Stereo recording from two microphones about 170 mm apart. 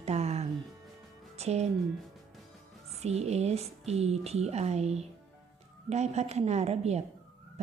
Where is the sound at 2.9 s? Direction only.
40° right (ahead or behind).